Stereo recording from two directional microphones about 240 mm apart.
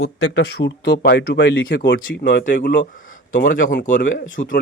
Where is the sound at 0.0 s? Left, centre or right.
Left.